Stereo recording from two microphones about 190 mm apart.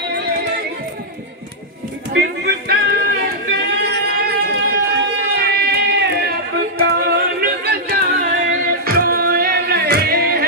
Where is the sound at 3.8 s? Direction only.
60° right (ahead or behind).